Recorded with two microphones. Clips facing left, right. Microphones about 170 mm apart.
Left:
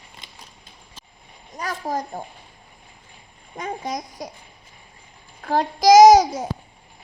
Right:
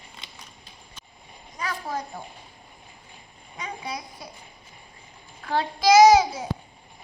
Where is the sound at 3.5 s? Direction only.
45° left (ahead or behind).